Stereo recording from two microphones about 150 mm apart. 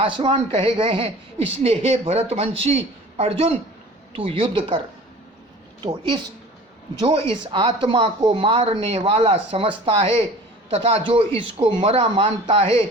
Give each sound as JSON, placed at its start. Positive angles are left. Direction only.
{"t": 0.0, "sound": "a woman's voice", "side_deg": -35}
{"t": 7.0, "sound": "a woman's voice", "side_deg": -35}